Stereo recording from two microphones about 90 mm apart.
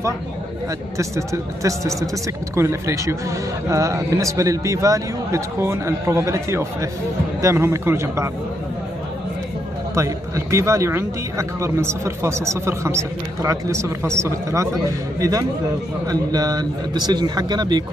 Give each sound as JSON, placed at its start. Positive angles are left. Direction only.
{"t": 0.9, "sound": "speech", "side_deg": -35}
{"t": 9.9, "sound": "speech", "side_deg": -35}